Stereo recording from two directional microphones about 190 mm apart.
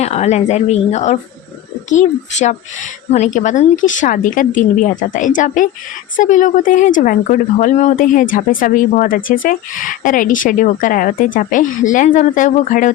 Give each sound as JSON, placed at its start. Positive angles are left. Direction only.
{"t": 0.0, "sound": "speech", "side_deg": 35}